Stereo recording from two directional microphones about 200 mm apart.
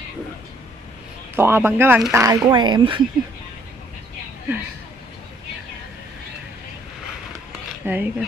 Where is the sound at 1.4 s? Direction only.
10° right (ahead or behind).